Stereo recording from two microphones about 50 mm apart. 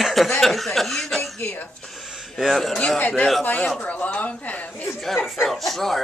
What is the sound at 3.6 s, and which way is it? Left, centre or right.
Speech, left.